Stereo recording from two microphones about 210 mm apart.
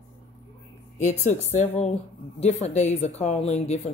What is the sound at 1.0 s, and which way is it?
Speech, 35° left (ahead or behind).